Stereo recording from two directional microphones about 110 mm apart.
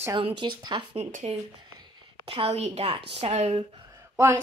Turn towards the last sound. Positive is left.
turn(degrees=-25)  # may be behind; listen again after turning